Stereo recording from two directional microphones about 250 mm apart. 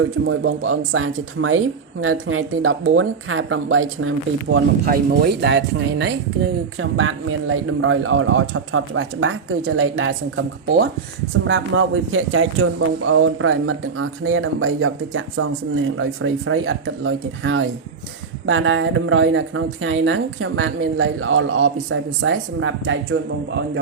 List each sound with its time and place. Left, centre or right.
0.0 s speech: right
4.9 s speech: right